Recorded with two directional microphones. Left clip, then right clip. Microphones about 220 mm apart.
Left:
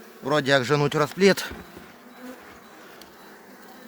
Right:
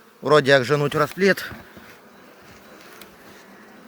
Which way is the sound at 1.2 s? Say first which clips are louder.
Left 2 dB; 20° left (ahead or behind).